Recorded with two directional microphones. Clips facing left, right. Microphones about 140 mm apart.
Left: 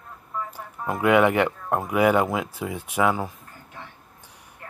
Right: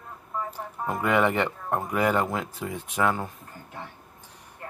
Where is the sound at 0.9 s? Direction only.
5° left (ahead or behind).